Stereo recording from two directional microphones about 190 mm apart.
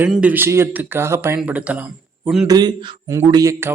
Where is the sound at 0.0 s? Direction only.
5° right (ahead or behind).